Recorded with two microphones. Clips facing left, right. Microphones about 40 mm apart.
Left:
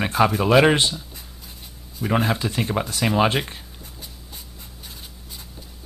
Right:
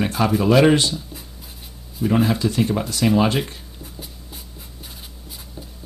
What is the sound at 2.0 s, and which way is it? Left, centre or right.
Speech, centre.